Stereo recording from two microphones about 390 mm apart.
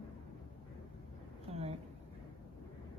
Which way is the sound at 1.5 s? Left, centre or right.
Centre.